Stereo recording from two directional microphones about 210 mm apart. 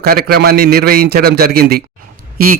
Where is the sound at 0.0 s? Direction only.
45° right (ahead or behind).